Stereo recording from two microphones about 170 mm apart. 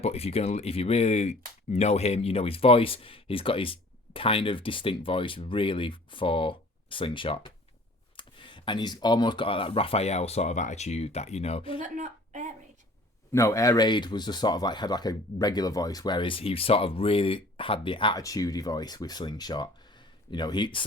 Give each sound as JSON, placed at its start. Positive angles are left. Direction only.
{"t": 0.0, "sound": "speech", "side_deg": 35}
{"t": 11.8, "sound": "a sound", "side_deg": -45}
{"t": 13.3, "sound": "speech", "side_deg": 15}